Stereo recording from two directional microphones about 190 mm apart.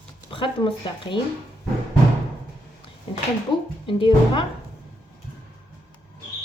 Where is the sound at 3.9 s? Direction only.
25° left (ahead or behind).